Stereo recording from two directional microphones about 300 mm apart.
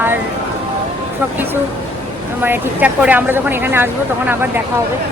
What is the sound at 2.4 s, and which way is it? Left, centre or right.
Speech, centre.